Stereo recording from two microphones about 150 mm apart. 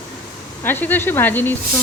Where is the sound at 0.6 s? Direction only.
15° left (ahead or behind).